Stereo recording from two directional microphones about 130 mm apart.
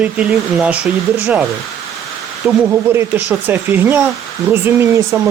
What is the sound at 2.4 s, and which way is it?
Speech, 5° right (ahead or behind).